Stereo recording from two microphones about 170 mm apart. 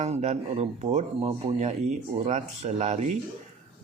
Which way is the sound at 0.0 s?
40° right (ahead or behind).